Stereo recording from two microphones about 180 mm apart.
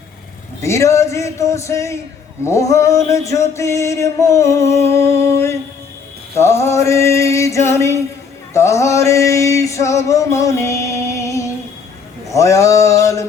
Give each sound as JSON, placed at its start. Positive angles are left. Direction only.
{"t": 0.6, "sound": "male singing", "side_deg": 15}
{"t": 8.5, "sound": "a sound", "side_deg": 15}
{"t": 12.3, "sound": "male singing", "side_deg": 15}